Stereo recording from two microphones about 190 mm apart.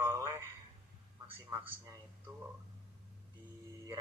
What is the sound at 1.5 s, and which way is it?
Speech, 20° right (ahead or behind).